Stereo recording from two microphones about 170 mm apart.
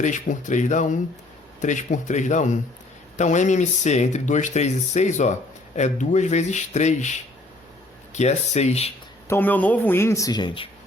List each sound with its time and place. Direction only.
0.0 s speech: 45° left (ahead or behind)
9.2 s speech: 15° left (ahead or behind); by 10.7 s 30° left (ahead or behind)